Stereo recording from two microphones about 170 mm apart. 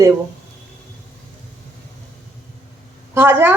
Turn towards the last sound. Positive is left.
turn(degrees=-15)  # may be behind; listen again after turning